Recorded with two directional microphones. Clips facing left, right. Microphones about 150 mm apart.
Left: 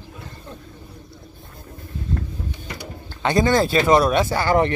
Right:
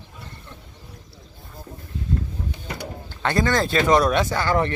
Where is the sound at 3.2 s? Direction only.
15° left (ahead or behind).